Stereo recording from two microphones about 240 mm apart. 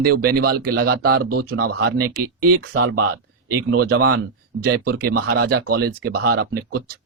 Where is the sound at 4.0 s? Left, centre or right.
Right.